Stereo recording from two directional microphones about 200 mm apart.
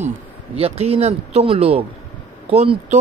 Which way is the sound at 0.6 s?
30° right (ahead or behind).